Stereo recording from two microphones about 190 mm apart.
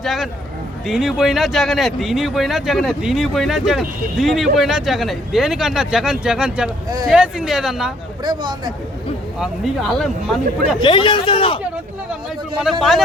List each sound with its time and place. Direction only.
0.0 s speech: centre (ahead or behind)
8.2 s speech: 25° right (ahead or behind)
9.4 s speech: centre (ahead or behind)
10.8 s speech: 25° left (ahead or behind)
12.7 s speech: centre (ahead or behind)